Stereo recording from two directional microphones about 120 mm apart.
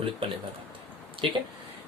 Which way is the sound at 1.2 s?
45° right (ahead or behind).